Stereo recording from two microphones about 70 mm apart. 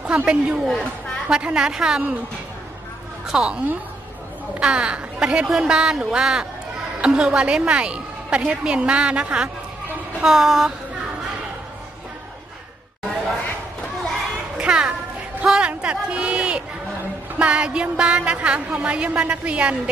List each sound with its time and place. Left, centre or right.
0.0 s a woman's voice: centre
3.3 s a woman's voice: centre
10.2 s a sound: centre
14.6 s music: centre
15.4 s a man's voice: centre